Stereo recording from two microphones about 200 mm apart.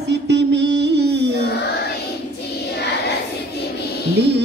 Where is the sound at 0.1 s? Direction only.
60° right (ahead or behind).